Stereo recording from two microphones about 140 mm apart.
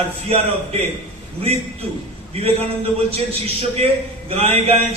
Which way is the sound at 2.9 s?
45° right (ahead or behind).